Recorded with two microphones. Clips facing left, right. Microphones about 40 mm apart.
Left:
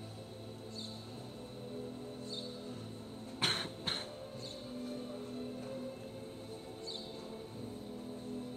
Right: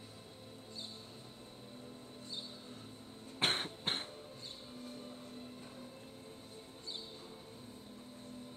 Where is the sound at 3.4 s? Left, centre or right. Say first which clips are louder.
Right 1 dB; right.